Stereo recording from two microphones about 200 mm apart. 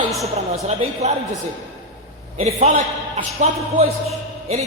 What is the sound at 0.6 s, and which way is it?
Speech, 35° right (ahead or behind).